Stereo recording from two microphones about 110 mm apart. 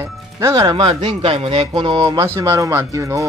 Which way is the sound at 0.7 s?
50° right (ahead or behind).